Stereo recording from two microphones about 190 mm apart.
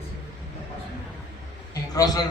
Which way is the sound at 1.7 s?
20° left (ahead or behind).